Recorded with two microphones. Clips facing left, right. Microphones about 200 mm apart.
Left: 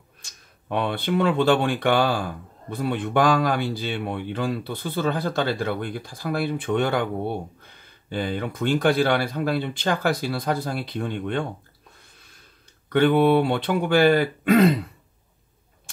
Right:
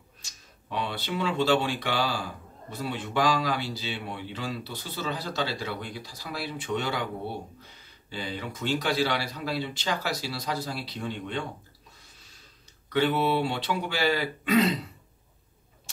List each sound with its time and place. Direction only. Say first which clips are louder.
0.2 s speech: left 1 dB; 55° left (ahead or behind)
12.0 s a sound: left 2 dB; 55° left (ahead or behind)
12.9 s speech: left 7 dB; 55° left (ahead or behind)